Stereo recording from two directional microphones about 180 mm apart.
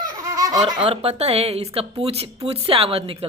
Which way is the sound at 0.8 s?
35° right (ahead or behind).